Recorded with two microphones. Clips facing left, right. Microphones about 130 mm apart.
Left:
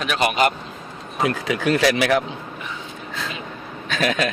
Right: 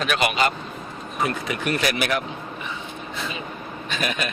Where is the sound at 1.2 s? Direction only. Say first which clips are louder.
Left 4 dB; 90° left.